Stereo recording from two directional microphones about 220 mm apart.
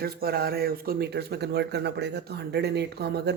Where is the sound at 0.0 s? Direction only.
45° right (ahead or behind).